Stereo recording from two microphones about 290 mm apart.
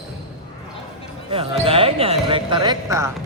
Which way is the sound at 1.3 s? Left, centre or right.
Centre.